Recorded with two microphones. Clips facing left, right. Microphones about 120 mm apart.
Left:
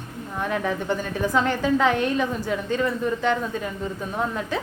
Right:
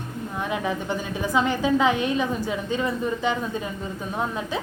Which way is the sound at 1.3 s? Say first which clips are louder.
Right 1 dB; 10° right (ahead or behind).